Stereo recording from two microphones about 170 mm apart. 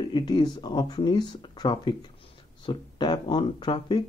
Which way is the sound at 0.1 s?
25° left (ahead or behind).